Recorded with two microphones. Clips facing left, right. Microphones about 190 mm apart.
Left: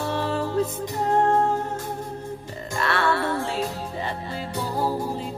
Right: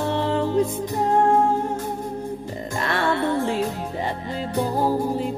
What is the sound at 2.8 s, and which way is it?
Music, 15° right (ahead or behind).